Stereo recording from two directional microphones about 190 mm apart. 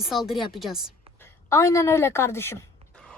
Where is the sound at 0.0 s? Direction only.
Centre (ahead or behind).